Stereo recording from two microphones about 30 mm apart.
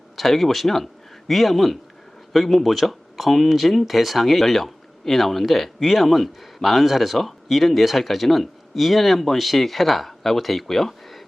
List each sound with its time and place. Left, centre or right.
0.2 s speech: centre